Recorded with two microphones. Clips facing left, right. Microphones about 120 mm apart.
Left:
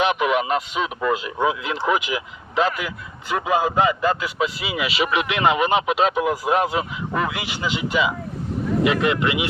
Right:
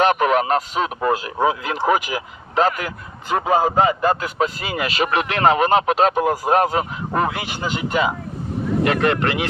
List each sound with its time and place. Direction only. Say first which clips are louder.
0.0 s speech: right 3 dB; 45° right (ahead or behind)